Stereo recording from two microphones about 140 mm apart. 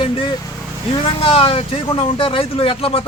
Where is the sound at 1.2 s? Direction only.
40° left (ahead or behind).